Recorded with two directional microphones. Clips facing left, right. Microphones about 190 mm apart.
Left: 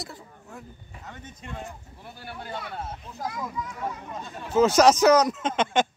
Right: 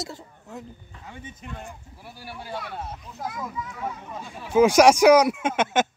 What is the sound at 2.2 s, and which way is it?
Speech, 5° right (ahead or behind).